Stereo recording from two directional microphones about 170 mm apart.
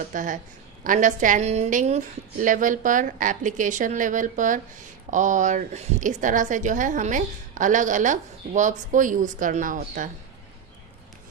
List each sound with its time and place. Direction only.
0.1 s a woman's voice: 50° right (ahead or behind)